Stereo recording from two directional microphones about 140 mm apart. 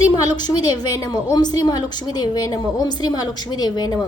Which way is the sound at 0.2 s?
25° left (ahead or behind).